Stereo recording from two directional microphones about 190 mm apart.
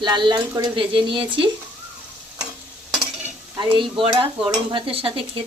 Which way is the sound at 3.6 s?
25° right (ahead or behind).